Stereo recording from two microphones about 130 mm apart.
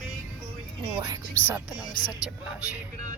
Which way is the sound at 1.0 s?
25° right (ahead or behind).